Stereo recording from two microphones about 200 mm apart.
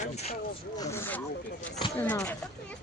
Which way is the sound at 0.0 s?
30° left (ahead or behind).